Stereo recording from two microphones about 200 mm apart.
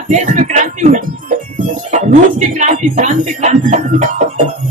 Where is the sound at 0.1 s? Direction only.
40° right (ahead or behind).